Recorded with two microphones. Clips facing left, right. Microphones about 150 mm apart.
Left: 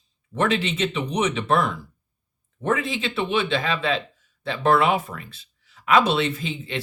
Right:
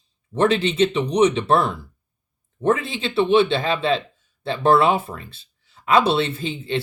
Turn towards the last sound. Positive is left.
turn(degrees=-30)  # may be behind; listen again after turning